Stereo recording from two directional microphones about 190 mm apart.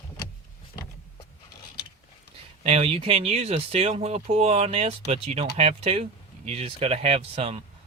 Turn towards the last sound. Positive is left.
turn(degrees=-30)  # may be behind; listen again after turning